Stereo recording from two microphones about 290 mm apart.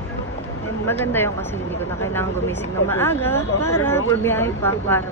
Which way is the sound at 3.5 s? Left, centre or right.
Left.